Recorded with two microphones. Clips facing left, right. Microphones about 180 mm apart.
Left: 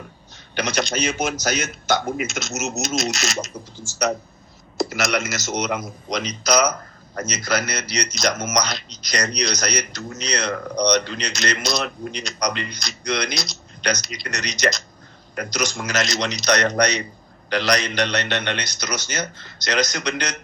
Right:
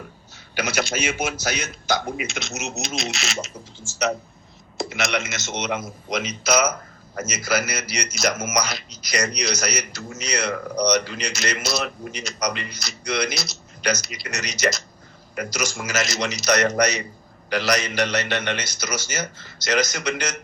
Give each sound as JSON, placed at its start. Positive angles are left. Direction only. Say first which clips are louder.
{"t": 0.5, "sound": "a man's voice", "louder": "left 1 dB", "side_deg": -5}
{"t": 1.0, "sound": "speech", "louder": "left 2 dB", "side_deg": 40}
{"t": 1.5, "sound": "a man's voice", "louder": "left 3 dB", "side_deg": 0}
{"t": 2.9, "sound": "speech", "louder": "left 4 dB", "side_deg": 40}
{"t": 5.0, "sound": "a man's voice", "louder": "even", "side_deg": 0}
{"t": 5.3, "sound": "speech", "louder": "left 3 dB", "side_deg": 40}
{"t": 5.7, "sound": "a man's voice", "louder": "left 1 dB", "side_deg": -5}